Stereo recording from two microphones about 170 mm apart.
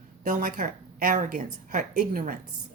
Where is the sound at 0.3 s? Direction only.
55° right (ahead or behind).